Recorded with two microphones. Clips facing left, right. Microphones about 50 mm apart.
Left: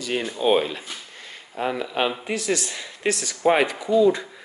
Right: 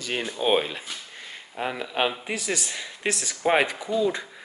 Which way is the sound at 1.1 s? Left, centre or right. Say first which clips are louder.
Even; centre.